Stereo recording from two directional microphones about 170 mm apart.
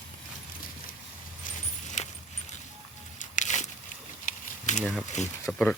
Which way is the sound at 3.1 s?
45° left (ahead or behind).